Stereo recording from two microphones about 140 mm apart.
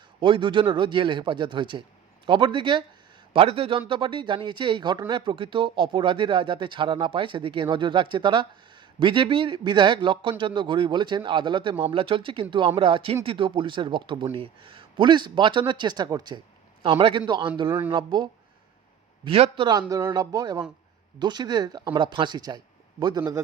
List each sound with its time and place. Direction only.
0.2 s a man's voice: 35° right (ahead or behind)
16.8 s a man's voice: 40° right (ahead or behind)